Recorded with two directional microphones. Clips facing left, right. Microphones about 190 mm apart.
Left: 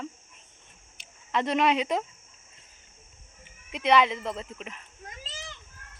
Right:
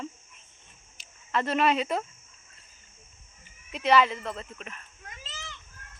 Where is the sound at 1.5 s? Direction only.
15° left (ahead or behind).